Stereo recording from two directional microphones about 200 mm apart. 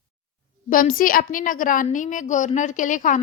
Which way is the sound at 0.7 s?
45° left (ahead or behind).